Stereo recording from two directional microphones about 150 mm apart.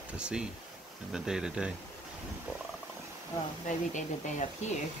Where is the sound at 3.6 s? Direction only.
55° left (ahead or behind).